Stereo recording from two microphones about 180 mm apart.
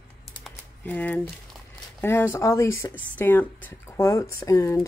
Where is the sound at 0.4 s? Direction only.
10° left (ahead or behind).